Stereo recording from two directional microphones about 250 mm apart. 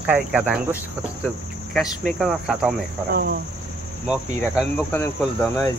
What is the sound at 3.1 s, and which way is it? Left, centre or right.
Cricket, right.